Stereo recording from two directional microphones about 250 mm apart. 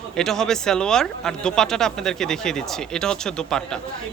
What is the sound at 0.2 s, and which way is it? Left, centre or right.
Speech, centre.